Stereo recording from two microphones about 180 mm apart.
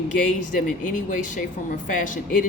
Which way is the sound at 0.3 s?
45° left (ahead or behind).